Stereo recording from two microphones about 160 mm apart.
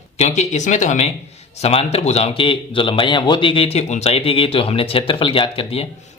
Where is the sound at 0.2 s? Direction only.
45° left (ahead or behind).